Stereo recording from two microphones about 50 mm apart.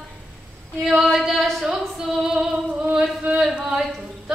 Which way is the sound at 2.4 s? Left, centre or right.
Centre.